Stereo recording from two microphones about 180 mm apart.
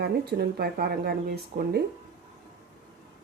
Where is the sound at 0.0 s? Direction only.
60° right (ahead or behind).